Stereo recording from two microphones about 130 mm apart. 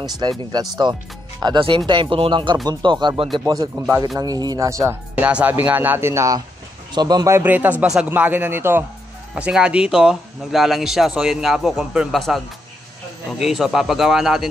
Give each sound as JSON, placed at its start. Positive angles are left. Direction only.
{"t": 0.0, "sound": "speech", "side_deg": -35}
{"t": 3.7, "sound": "speech", "side_deg": -15}
{"t": 4.2, "sound": "speech", "side_deg": -30}
{"t": 5.1, "sound": "speech", "side_deg": -10}
{"t": 7.3, "sound": "speech", "side_deg": -15}
{"t": 9.3, "sound": "a man's voice", "side_deg": -5}